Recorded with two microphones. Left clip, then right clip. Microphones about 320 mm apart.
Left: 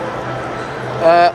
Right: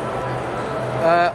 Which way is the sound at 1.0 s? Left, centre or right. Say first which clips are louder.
Left 6 dB; centre.